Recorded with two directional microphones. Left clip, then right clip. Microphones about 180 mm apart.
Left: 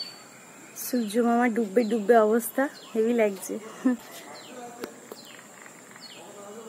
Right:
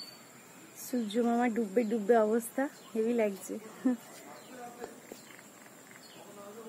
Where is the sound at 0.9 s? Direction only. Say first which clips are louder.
Left 6 dB; centre (ahead or behind).